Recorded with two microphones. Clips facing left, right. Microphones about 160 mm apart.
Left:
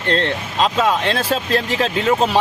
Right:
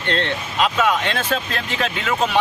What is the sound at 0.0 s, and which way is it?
Speech, 35° left (ahead or behind).